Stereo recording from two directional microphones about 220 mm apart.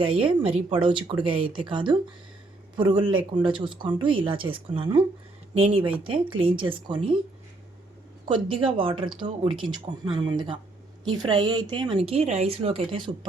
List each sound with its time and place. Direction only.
0.0 s speech: 25° right (ahead or behind)
8.3 s speech: 25° right (ahead or behind)